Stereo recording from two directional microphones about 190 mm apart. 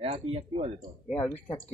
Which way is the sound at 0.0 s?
30° right (ahead or behind).